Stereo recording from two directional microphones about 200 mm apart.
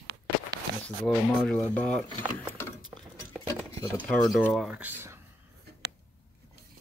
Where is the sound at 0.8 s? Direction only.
Centre (ahead or behind).